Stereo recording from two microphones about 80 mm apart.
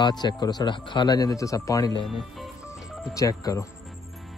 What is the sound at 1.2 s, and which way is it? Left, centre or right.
Speech, left.